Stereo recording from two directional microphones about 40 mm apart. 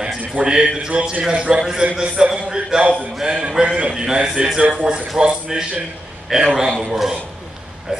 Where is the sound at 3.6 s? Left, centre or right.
Right.